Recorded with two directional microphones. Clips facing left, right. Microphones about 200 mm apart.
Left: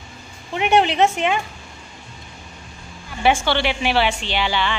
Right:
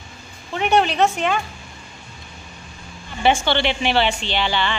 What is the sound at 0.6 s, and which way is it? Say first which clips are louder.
Speech: left 1 dB; 25° left (ahead or behind).